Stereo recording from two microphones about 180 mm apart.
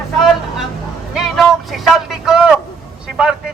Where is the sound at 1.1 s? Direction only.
Centre (ahead or behind).